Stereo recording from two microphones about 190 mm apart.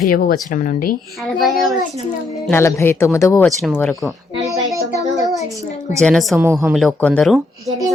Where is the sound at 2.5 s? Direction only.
15° left (ahead or behind).